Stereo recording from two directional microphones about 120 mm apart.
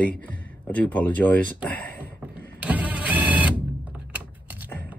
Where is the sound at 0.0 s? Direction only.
10° left (ahead or behind).